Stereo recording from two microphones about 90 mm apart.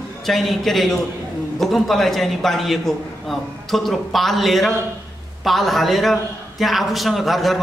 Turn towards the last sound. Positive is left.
turn(degrees=0)  # may be behind; listen again after turning